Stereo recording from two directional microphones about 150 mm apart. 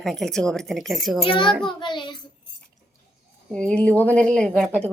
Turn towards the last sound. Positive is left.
turn(degrees=5)  # may be behind; listen again after turning